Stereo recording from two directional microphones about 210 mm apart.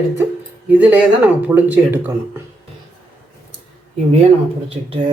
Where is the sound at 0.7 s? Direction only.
5° right (ahead or behind).